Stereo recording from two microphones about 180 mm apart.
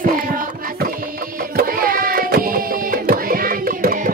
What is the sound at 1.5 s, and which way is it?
Music, 55° right (ahead or behind).